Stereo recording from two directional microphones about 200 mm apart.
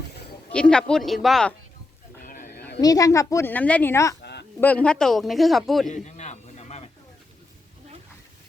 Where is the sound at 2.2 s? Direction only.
45° left (ahead or behind).